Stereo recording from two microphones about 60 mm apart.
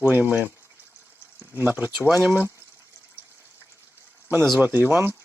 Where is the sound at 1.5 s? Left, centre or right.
Right.